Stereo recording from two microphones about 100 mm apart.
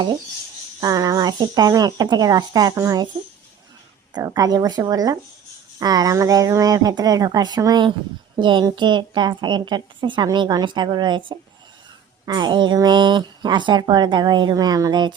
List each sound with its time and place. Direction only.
0.8 s speech: 40° right (ahead or behind)
4.1 s speech: 40° right (ahead or behind)
12.2 s speech: 45° right (ahead or behind)